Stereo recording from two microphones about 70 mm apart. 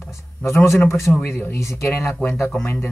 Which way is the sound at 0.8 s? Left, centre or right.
Left.